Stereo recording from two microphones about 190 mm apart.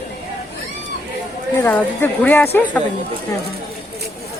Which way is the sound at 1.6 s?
10° left (ahead or behind).